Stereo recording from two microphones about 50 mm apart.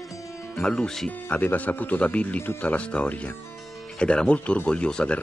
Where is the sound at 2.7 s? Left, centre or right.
Left.